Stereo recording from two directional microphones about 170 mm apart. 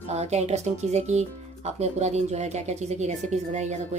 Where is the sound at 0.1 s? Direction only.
40° right (ahead or behind).